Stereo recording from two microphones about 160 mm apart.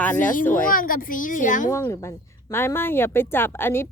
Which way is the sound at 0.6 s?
60° left (ahead or behind).